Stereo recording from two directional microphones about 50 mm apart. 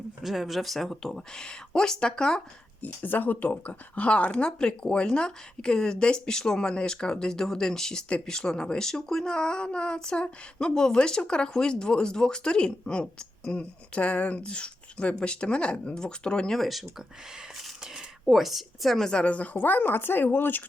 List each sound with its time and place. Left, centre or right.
0.2 s speech: centre
2.8 s speech: left; by 16.6 s centre
16.6 s speech: centre
17.6 s a sound: centre
19.1 s speech: left